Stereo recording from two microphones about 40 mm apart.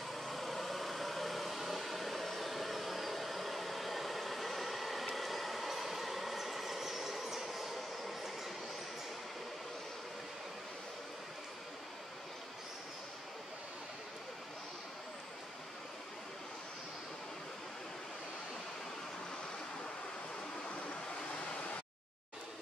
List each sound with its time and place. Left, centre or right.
0.1 s vehicle: centre